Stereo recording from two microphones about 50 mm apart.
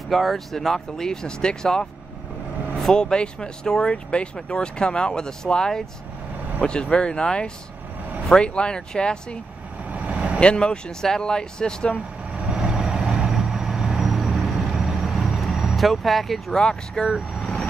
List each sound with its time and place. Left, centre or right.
0.1 s speech: centre
2.9 s speech: centre
9.8 s vehicle: right
10.4 s speech: centre
12.5 s vehicle: centre
16.5 s speech: centre